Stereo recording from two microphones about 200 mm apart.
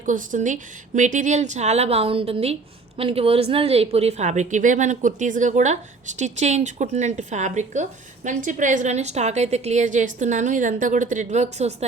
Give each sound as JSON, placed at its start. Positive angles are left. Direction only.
{"t": 0.0, "sound": "a woman's voice", "side_deg": -40}